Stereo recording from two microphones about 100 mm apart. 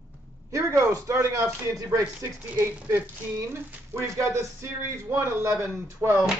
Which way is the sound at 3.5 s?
30° right (ahead or behind).